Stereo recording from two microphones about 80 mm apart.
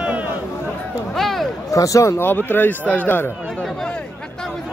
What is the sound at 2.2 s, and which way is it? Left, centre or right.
Speech, left.